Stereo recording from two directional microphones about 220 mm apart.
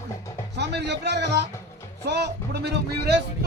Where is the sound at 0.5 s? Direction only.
50° right (ahead or behind).